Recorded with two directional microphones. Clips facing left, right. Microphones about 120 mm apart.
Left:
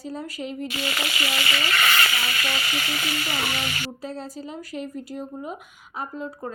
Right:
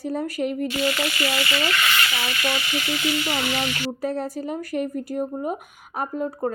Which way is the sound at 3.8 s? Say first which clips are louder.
Right 7 dB; 60° right (ahead or behind).